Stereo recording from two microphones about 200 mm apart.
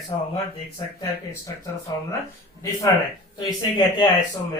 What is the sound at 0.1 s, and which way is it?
Speech, 20° left (ahead or behind).